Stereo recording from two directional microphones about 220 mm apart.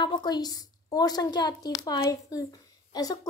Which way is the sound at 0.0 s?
20° left (ahead or behind).